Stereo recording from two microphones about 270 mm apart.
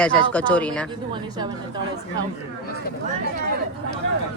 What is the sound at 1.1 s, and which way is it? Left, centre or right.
Speech, centre.